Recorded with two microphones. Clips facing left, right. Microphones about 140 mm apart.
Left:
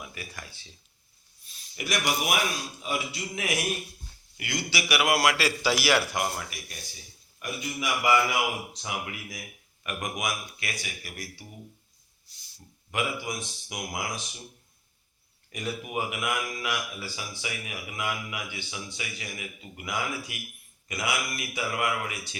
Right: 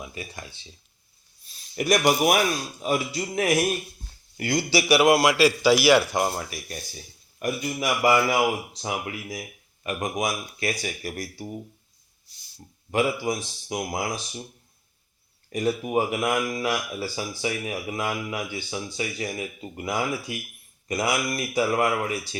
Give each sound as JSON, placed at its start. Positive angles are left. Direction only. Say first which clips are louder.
{"t": 0.0, "sound": "speech", "louder": "right 4 dB", "side_deg": -25}
{"t": 1.7, "sound": "speech", "louder": "right 8 dB", "side_deg": -45}
{"t": 5.1, "sound": "a man's voice", "louder": "right 6 dB", "side_deg": -15}
{"t": 6.1, "sound": "speech", "louder": "right 5 dB", "side_deg": -30}
{"t": 7.3, "sound": "speech", "louder": "right 7 dB", "side_deg": -45}
{"t": 12.9, "sound": "speech", "louder": "right 7 dB", "side_deg": -35}
{"t": 15.5, "sound": "speech", "louder": "right 8 dB", "side_deg": -35}